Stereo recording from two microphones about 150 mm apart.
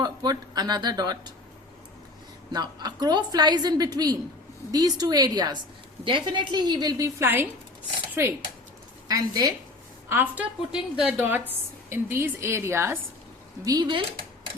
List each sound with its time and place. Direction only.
0.0 s a woman's voice: 25° right (ahead or behind)
2.5 s a woman's voice: 25° right (ahead or behind)
7.2 s a woman's voice: 15° right (ahead or behind)
10.1 s a woman's voice: 10° right (ahead or behind)
13.7 s a woman's voice: 30° right (ahead or behind)